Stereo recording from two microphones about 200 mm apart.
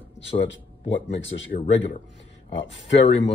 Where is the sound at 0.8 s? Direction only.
25° left (ahead or behind).